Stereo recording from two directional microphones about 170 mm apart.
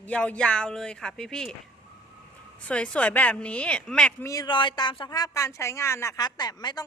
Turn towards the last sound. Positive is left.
turn(degrees=25)  # may be behind; listen again after turning